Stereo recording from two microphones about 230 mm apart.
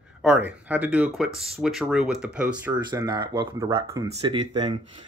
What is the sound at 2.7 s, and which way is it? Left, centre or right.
Speech, centre.